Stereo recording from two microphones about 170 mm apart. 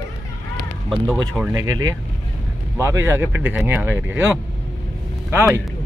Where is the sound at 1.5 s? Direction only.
20° right (ahead or behind).